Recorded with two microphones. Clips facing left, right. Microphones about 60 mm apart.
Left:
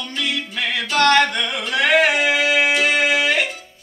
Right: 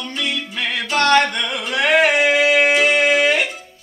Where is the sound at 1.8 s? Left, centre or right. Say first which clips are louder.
Right 1 dB; centre.